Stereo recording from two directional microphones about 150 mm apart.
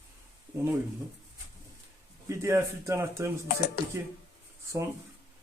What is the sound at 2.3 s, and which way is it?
Speech, 20° right (ahead or behind).